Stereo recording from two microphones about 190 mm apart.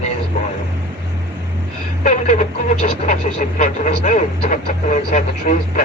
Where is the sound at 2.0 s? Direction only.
40° left (ahead or behind).